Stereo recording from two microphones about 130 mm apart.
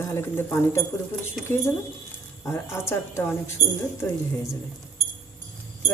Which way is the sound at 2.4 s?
20° left (ahead or behind).